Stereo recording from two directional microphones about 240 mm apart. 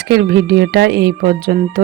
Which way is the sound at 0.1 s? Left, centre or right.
Right.